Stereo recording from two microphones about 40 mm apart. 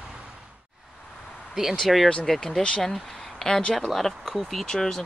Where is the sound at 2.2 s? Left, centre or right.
Centre.